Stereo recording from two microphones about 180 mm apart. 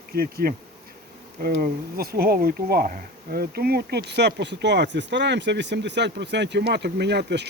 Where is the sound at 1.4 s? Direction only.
55° right (ahead or behind).